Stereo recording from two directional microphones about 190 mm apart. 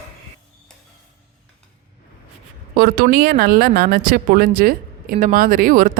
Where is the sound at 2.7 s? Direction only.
55° right (ahead or behind).